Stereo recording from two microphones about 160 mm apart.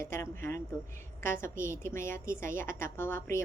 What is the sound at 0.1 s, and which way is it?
A woman's voice, 15° left (ahead or behind).